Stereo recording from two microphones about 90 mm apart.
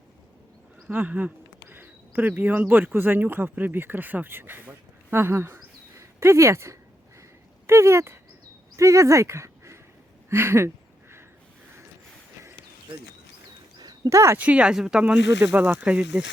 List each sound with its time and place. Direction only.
0.9 s speech: 20° right (ahead or behind)
10.2 s a sound: 30° right (ahead or behind)
13.7 s a sound: 50° right (ahead or behind)
14.1 s speech: 30° right (ahead or behind)
14.3 s speech: 15° right (ahead or behind)
15.4 s speech: 20° right (ahead or behind)